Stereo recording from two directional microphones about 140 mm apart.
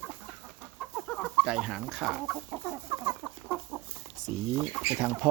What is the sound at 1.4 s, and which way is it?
Speech, 5° right (ahead or behind).